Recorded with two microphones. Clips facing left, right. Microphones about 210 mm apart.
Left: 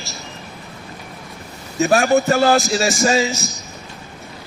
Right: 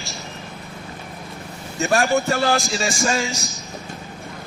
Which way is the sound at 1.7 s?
Centre (ahead or behind).